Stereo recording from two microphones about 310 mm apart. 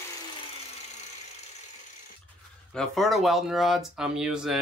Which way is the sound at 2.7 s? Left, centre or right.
Centre.